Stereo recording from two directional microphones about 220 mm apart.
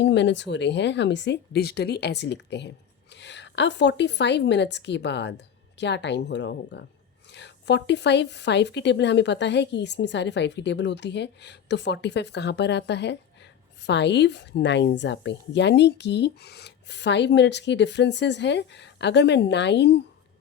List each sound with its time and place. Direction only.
0.0 s speech: 55° left (ahead or behind)